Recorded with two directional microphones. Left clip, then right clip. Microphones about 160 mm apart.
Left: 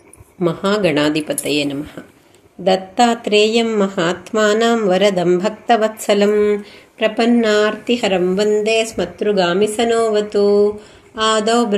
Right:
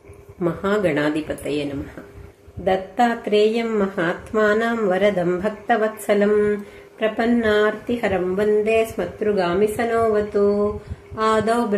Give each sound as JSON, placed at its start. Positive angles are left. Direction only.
{"t": 0.4, "sound": "speech", "side_deg": 30}